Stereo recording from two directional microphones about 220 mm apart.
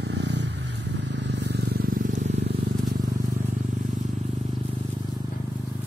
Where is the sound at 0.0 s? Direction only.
50° right (ahead or behind).